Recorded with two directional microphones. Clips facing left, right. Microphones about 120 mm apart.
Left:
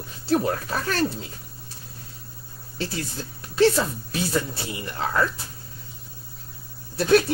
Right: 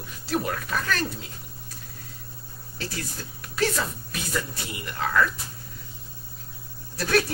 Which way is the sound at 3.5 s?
30° left (ahead or behind).